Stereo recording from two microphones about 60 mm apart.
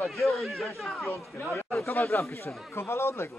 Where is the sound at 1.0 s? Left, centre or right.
Left.